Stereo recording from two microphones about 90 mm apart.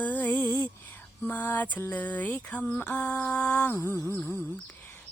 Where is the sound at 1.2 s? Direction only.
20° left (ahead or behind).